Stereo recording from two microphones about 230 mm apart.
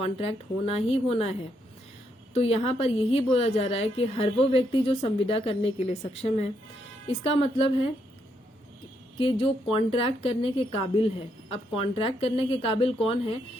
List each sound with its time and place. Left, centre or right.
0.0 s a woman's voice: left
9.1 s a woman's voice: left